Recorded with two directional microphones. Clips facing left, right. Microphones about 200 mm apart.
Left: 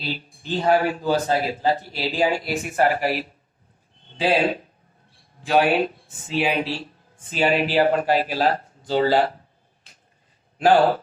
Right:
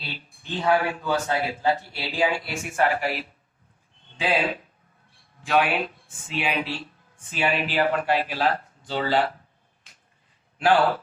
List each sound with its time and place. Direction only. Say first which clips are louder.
0.0 s a man's voice: left 8 dB; 35° left (ahead or behind)
10.6 s a man's voice: left 4 dB; 40° left (ahead or behind)